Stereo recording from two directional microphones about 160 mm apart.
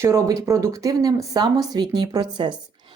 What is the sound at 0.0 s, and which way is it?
Speech, 20° right (ahead or behind).